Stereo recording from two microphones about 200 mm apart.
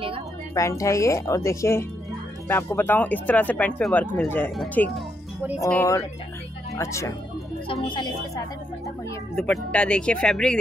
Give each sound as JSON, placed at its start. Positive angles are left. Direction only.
{"t": 0.6, "sound": "speech", "side_deg": 15}
{"t": 9.3, "sound": "speech", "side_deg": 0}